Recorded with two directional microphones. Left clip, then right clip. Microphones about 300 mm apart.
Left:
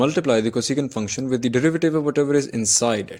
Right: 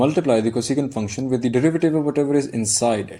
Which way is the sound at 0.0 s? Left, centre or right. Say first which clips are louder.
Right 1 dB; left.